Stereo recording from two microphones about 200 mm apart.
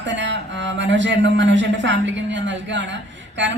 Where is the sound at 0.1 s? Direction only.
65° right (ahead or behind).